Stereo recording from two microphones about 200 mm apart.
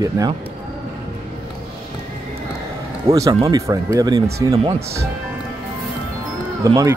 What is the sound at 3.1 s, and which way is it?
Speech, 15° right (ahead or behind).